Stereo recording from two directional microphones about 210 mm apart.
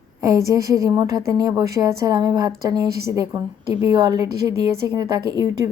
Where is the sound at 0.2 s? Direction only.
15° right (ahead or behind).